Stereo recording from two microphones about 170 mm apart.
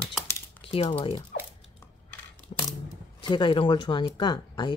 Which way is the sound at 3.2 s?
30° left (ahead or behind).